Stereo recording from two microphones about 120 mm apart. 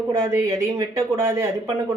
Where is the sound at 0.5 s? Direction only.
25° right (ahead or behind).